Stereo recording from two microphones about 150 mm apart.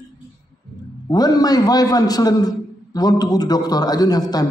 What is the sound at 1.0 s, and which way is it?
A man's voice, 25° left (ahead or behind).